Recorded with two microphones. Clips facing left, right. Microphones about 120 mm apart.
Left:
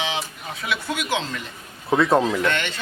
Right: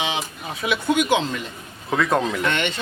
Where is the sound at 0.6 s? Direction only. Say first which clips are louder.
Right 7 dB; 15° right (ahead or behind).